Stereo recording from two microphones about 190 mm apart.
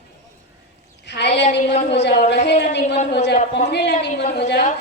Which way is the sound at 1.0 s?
65° left (ahead or behind).